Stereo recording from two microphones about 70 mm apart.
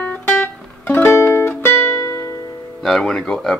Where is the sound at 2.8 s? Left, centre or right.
Centre.